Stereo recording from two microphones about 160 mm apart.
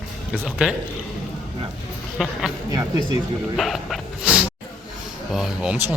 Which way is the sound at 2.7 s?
25° right (ahead or behind).